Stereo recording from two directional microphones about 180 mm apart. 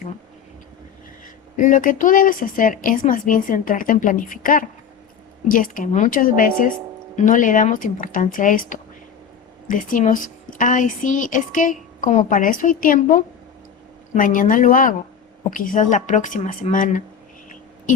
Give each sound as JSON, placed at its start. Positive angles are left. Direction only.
{"t": 1.5, "sound": "speech", "side_deg": 45}